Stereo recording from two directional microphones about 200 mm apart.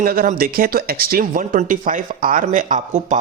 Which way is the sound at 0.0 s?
45° right (ahead or behind).